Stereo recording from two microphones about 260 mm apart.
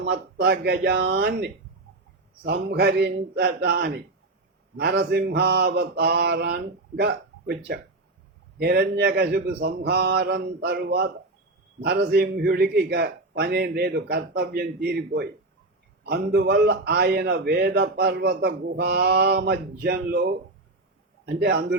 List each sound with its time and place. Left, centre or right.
0.1 s a man's voice: right
2.6 s a man's voice: right
16.0 s a man's voice: right